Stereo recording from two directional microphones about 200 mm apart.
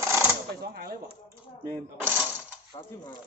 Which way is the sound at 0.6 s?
50° right (ahead or behind).